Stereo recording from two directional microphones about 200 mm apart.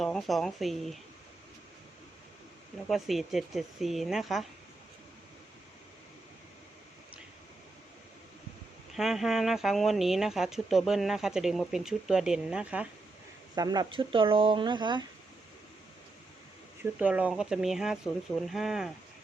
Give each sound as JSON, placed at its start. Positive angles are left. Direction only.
{"t": 0.0, "sound": "speech", "side_deg": 0}
{"t": 2.8, "sound": "speech", "side_deg": 0}
{"t": 9.0, "sound": "speech", "side_deg": 0}
{"t": 13.6, "sound": "speech", "side_deg": -20}
{"t": 17.0, "sound": "speech", "side_deg": -5}